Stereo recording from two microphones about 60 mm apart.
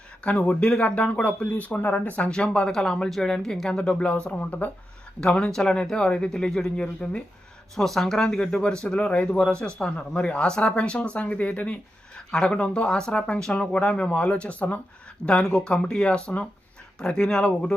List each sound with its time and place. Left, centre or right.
0.3 s speech: left
5.2 s speech: centre